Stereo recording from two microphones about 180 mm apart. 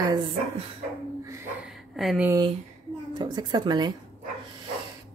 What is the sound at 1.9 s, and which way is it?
Speech, centre (ahead or behind).